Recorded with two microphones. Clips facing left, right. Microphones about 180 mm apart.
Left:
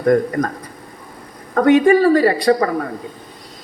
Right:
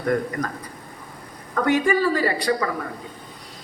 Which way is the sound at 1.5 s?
60° left (ahead or behind).